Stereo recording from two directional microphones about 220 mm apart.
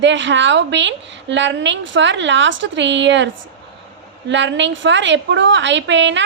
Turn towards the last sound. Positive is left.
turn(degrees=-55)  # may be behind; listen again after turning